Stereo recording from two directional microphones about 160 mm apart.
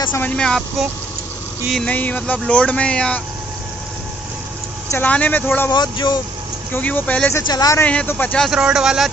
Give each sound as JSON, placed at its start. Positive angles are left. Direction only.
{"t": 0.0, "sound": "speech", "side_deg": 15}
{"t": 4.9, "sound": "speech", "side_deg": 10}
{"t": 5.7, "sound": "speech", "side_deg": 25}
{"t": 6.7, "sound": "speech", "side_deg": 10}
{"t": 7.4, "sound": "speech", "side_deg": 25}
{"t": 7.9, "sound": "speech", "side_deg": 10}
{"t": 8.4, "sound": "speech", "side_deg": -5}